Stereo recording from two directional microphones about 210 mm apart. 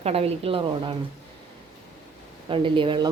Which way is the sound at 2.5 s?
25° right (ahead or behind).